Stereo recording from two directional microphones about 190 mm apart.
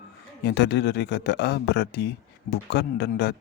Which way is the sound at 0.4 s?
60° left (ahead or behind).